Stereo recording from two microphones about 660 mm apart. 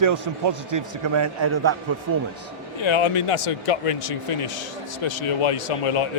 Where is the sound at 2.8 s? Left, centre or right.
Left.